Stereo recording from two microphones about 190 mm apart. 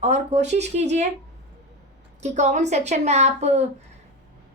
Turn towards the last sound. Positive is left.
turn(degrees=-35)  # may be behind; listen again after turning